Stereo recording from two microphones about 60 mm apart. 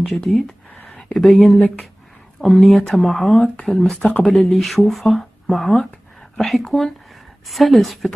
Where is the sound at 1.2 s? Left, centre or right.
Centre.